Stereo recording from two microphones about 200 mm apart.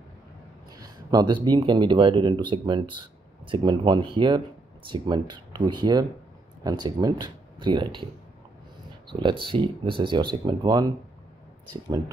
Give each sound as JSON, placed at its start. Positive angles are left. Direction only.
{"t": 0.7, "sound": "speech", "side_deg": -20}
{"t": 9.1, "sound": "speech", "side_deg": -25}